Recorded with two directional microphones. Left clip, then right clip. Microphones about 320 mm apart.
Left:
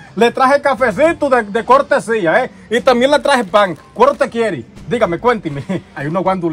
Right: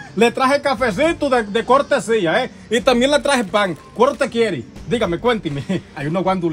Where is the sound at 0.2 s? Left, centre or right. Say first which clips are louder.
Left 4 dB; centre.